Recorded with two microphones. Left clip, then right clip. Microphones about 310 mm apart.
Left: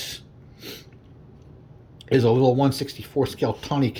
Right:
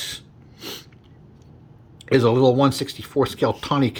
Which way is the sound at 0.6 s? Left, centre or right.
Centre.